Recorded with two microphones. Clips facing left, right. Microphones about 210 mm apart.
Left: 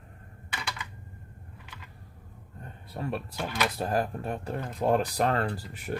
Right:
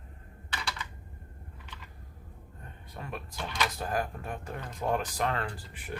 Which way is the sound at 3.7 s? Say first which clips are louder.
Left 4 dB; 35° left (ahead or behind).